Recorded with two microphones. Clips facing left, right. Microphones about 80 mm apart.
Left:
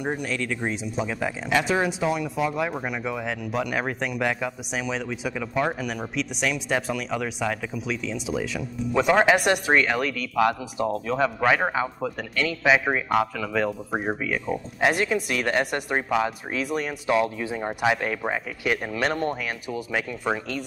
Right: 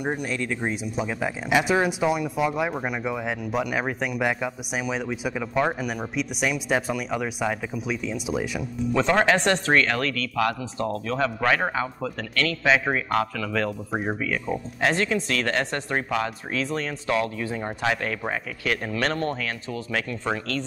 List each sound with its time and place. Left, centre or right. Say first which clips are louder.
0.0 s speech: right 1 dB; centre
0.3 s speech: even; centre
0.6 s speech: even; centre
8.9 s speech: left 2 dB; centre